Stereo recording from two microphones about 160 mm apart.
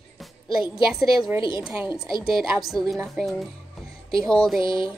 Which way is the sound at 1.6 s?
10° right (ahead or behind).